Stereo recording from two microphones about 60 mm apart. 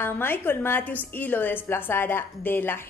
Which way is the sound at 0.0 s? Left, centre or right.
Left.